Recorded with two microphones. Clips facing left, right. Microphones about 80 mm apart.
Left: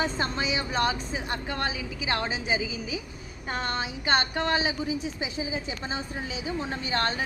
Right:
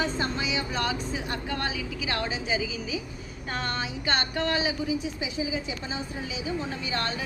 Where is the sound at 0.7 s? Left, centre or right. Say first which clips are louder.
Left 2 dB; left.